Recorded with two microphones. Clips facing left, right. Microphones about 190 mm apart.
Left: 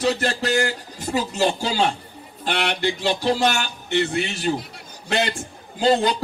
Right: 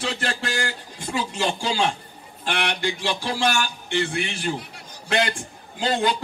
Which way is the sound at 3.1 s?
40° left (ahead or behind).